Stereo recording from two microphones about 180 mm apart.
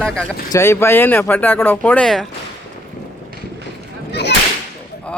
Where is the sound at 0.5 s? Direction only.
15° left (ahead or behind).